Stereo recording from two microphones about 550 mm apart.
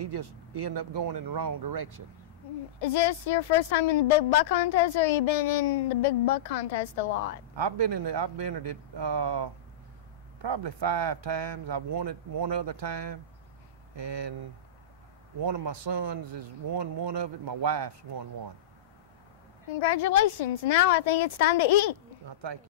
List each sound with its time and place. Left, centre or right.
0.0 s speech: right
2.8 s a woman's voice: left
7.5 s speech: right
19.7 s a woman's voice: left